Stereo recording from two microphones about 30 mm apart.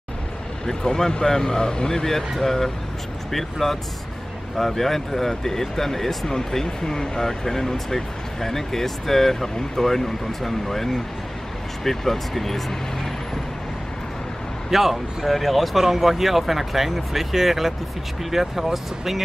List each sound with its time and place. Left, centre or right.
0.7 s speech: centre
2.4 s speech: centre
14.7 s speech: centre